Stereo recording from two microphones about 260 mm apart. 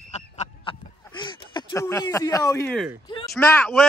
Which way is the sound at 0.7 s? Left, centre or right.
Centre.